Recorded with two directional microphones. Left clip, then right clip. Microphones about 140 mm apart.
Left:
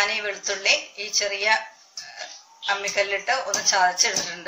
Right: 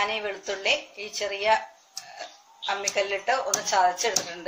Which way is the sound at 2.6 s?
65° right (ahead or behind).